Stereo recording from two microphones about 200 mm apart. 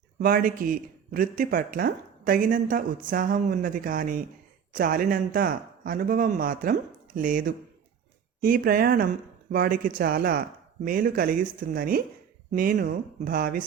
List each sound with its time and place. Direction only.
0.2 s a man's voice: 45° right (ahead or behind)